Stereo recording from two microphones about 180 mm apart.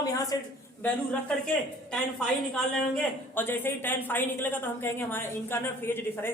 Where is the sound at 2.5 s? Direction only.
5° left (ahead or behind).